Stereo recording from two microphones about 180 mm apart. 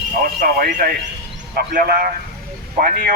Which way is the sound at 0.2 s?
55° right (ahead or behind).